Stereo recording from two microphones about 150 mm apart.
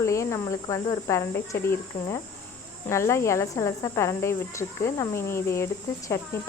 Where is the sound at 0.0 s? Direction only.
20° left (ahead or behind).